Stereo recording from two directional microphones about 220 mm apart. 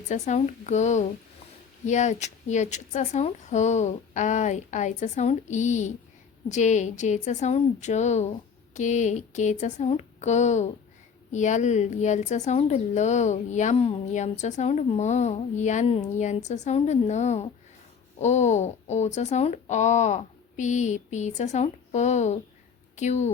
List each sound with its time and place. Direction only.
0.1 s speech: 30° left (ahead or behind)